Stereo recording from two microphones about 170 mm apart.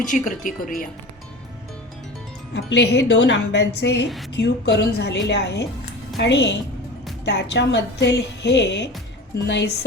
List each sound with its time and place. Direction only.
0.0 s speech: 50° left (ahead or behind)
2.5 s a woman's voice: 90° left
4.4 s a woman's voice: 90° left
6.1 s a woman's voice: 90° left